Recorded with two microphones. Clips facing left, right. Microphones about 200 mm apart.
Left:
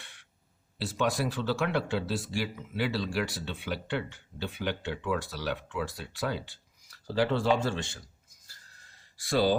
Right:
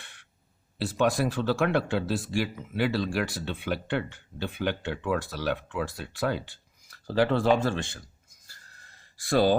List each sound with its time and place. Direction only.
0.0 s a sound: 50° right (ahead or behind)
0.9 s speech: 50° right (ahead or behind)
9.1 s speech: 50° right (ahead or behind)